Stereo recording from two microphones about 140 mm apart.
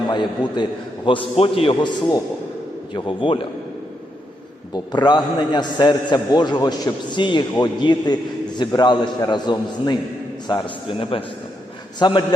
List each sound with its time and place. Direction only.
0.1 s a man's voice: 30° left (ahead or behind)
4.9 s a man's voice: 30° left (ahead or behind)